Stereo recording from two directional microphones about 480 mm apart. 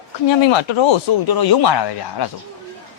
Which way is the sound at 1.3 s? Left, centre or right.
Left.